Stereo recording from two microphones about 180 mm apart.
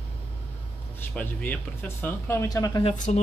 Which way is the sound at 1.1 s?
10° left (ahead or behind).